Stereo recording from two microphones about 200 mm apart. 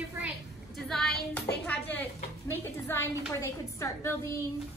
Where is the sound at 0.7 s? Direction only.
Centre (ahead or behind).